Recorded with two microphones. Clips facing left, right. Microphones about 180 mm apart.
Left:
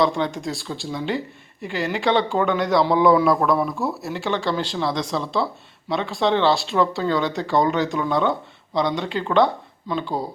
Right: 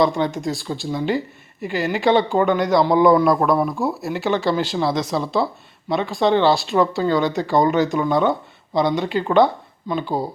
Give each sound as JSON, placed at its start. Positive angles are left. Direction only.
{"t": 0.0, "sound": "speech", "side_deg": 0}